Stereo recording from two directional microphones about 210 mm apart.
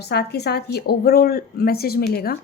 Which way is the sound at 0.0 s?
50° left (ahead or behind).